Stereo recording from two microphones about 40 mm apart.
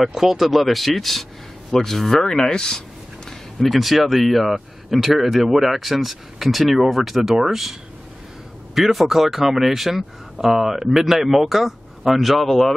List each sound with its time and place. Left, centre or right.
0.0 s a man's voice: centre
2.2 s speech: centre
3.3 s speech: centre
8.7 s speech: centre